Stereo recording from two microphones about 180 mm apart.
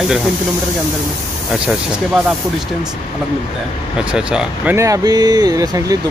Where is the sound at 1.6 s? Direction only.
5° right (ahead or behind).